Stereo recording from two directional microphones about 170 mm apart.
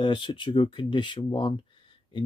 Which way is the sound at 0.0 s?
30° left (ahead or behind).